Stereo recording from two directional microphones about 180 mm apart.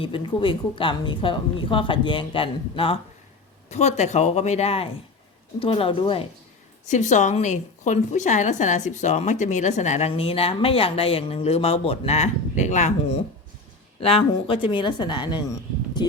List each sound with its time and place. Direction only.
0.0 s a woman's voice: 30° left (ahead or behind)
6.8 s a woman's voice: 40° left (ahead or behind); by 15.4 s 25° left (ahead or behind)